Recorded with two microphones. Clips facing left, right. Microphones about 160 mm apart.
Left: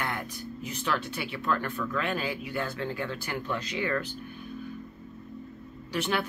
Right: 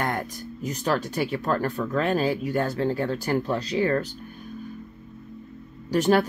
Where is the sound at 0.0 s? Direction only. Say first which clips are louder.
Right 6 dB; 40° right (ahead or behind).